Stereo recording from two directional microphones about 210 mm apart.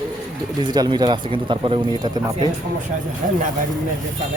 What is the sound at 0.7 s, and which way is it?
Speech, 20° right (ahead or behind).